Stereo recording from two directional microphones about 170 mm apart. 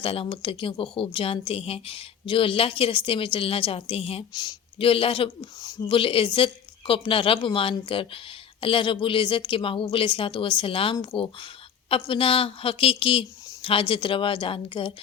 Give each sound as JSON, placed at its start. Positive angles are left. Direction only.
{"t": 0.0, "sound": "a woman's voice", "side_deg": 35}